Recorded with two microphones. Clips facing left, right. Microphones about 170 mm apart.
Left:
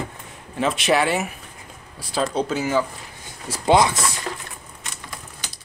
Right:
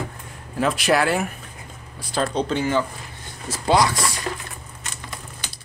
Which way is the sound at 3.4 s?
20° left (ahead or behind).